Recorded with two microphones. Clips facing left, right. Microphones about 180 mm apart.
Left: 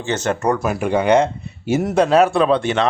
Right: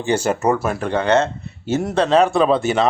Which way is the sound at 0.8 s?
10° left (ahead or behind).